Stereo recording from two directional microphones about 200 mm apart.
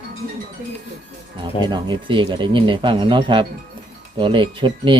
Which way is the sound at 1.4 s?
25° right (ahead or behind).